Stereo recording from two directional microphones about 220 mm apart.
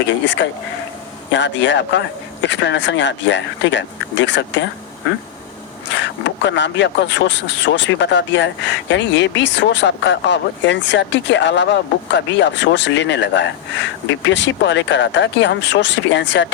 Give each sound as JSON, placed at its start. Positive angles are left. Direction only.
{"t": 0.1, "sound": "speech", "side_deg": 55}
{"t": 5.9, "sound": "speech", "side_deg": 55}